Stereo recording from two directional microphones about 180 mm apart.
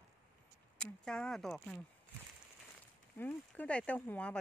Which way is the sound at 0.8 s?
5° left (ahead or behind).